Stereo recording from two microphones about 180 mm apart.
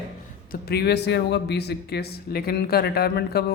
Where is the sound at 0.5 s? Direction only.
60° left (ahead or behind).